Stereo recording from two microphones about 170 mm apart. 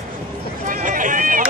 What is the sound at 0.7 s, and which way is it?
Run, 50° right (ahead or behind).